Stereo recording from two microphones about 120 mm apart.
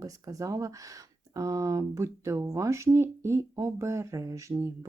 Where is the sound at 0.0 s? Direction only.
30° right (ahead or behind).